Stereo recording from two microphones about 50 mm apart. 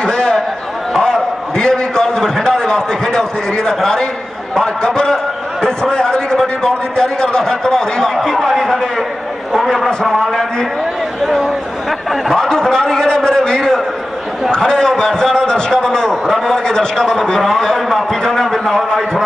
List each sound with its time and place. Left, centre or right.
0.0 s a sound: centre
4.6 s a man's voice: centre
10.0 s a man's voice: centre